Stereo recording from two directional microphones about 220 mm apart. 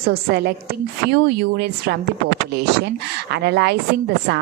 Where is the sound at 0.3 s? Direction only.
45° right (ahead or behind).